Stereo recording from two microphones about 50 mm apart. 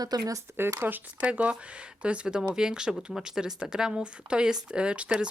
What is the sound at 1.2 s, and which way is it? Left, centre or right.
Speech, right.